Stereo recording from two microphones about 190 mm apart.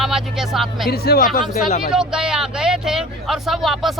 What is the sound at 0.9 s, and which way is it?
Speech, 55° left (ahead or behind).